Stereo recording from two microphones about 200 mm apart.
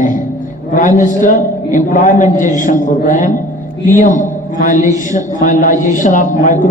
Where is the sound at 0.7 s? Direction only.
40° left (ahead or behind).